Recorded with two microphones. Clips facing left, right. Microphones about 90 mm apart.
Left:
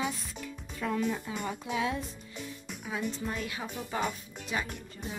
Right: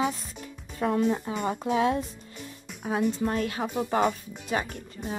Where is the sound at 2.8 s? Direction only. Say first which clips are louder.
Right 9 dB; 55° right (ahead or behind).